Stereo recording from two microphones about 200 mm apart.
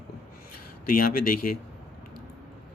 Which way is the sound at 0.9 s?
45° left (ahead or behind).